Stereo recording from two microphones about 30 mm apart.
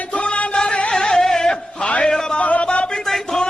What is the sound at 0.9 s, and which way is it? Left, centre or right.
Music, left.